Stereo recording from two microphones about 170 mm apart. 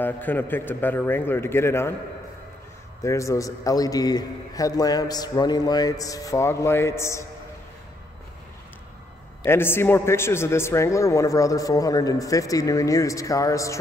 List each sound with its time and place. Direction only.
0.0 s a man's voice: 10° left (ahead or behind)
3.0 s a man's voice: 20° left (ahead or behind)
9.4 s a man's voice: 15° left (ahead or behind)